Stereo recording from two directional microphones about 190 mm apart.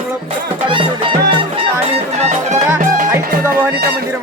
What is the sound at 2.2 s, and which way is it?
Music, 35° right (ahead or behind).